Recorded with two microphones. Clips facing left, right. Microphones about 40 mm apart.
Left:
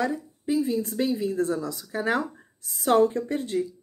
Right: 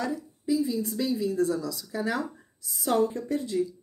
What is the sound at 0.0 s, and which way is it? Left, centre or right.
A woman's voice, left.